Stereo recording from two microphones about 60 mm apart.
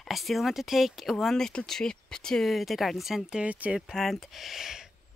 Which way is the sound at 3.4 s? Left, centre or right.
Right.